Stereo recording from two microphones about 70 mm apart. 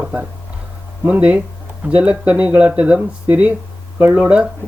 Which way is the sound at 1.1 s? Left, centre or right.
Right.